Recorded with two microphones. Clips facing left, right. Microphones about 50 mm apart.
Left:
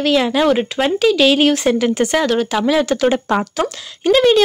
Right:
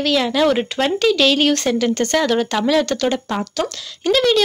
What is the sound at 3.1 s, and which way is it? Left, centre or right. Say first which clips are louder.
Speech: left 5 dB; left.